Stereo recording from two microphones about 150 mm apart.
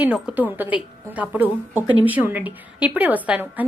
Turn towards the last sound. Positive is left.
turn(degrees=-10)  # may be behind; listen again after turning